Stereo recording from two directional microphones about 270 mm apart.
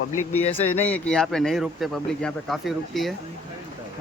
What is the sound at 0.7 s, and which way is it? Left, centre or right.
A man's voice, centre.